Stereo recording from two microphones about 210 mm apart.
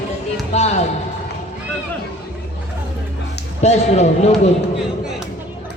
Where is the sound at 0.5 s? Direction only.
30° left (ahead or behind).